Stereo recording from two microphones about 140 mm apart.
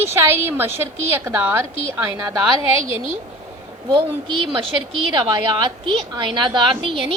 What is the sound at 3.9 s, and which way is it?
A woman's voice, 35° right (ahead or behind).